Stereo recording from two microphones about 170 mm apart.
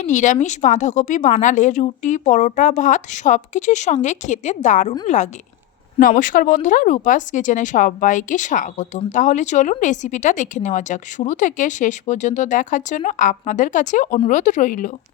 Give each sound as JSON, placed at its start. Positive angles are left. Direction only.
{"t": 0.0, "sound": "a woman's voice", "side_deg": 45}